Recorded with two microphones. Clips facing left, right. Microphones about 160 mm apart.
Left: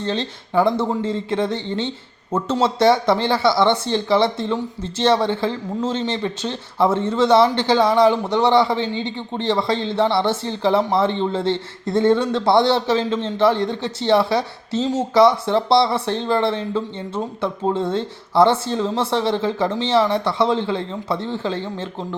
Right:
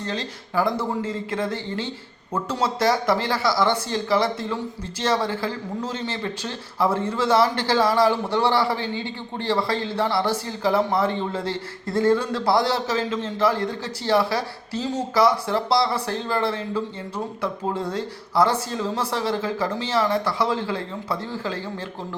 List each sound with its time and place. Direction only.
0.0 s speech: 25° left (ahead or behind)